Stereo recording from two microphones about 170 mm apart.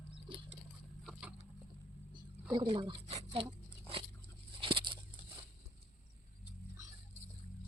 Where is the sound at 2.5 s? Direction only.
30° right (ahead or behind).